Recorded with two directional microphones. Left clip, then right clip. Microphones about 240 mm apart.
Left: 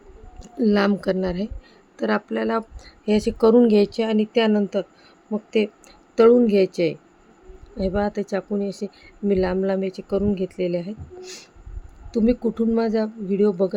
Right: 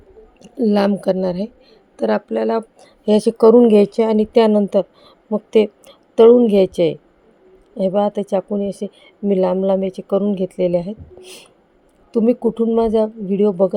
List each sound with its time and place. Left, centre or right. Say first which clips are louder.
0.3 s a woman's voice: right 4 dB; centre